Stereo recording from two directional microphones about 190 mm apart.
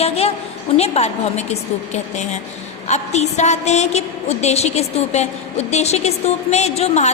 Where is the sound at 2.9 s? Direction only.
35° left (ahead or behind).